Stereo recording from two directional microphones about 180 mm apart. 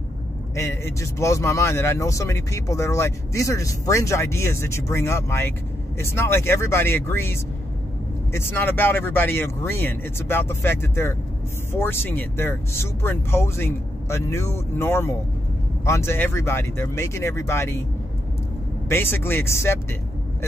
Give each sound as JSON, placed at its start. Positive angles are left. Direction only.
{"t": 0.6, "sound": "speech", "side_deg": 15}
{"t": 18.9, "sound": "speech", "side_deg": 10}